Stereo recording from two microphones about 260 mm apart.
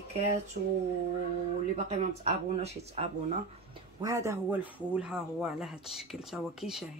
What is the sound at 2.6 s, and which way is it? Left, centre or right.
Speech, right.